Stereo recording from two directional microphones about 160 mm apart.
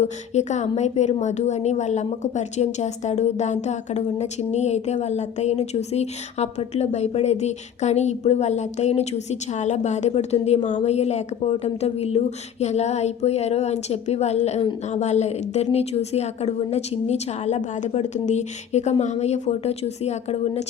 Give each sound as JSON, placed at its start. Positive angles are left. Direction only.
{"t": 0.0, "sound": "a woman's voice", "side_deg": 45}